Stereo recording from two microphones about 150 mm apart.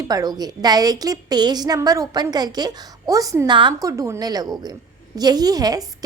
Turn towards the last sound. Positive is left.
turn(degrees=-25)  # may be behind; listen again after turning